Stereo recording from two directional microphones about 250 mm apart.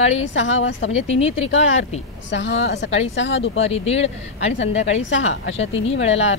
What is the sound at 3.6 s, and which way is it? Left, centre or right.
Speech, left.